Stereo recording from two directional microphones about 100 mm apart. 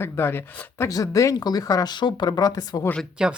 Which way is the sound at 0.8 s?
35° left (ahead or behind).